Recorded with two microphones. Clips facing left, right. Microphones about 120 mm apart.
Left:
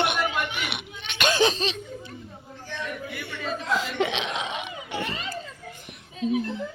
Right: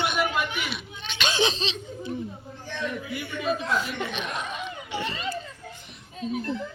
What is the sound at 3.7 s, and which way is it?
Speech, 90° left.